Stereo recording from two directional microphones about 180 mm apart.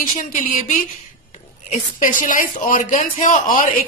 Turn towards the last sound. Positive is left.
turn(degrees=45)  # may be behind; listen again after turning